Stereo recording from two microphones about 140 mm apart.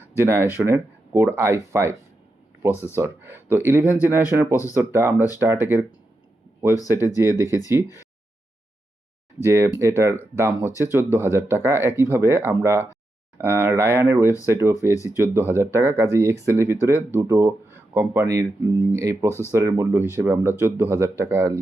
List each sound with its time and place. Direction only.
0.2 s speech: 15° right (ahead or behind)
6.8 s speech: 15° right (ahead or behind)
9.4 s speech: 20° right (ahead or behind)